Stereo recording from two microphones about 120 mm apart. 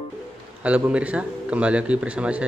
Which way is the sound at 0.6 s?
10° right (ahead or behind).